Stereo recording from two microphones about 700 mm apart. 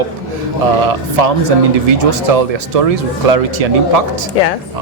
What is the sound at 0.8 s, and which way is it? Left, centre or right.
Speech, right.